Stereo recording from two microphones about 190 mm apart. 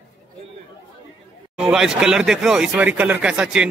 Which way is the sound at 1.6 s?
5° right (ahead or behind).